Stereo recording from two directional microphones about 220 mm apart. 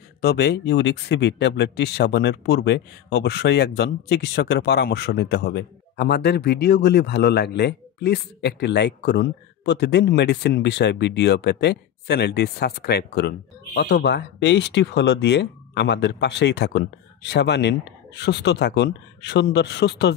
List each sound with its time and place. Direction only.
0.2 s speech: 45° left (ahead or behind)